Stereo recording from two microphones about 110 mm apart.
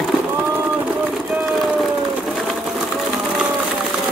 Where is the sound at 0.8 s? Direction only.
10° right (ahead or behind).